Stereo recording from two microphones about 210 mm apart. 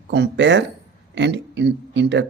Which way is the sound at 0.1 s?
55° right (ahead or behind).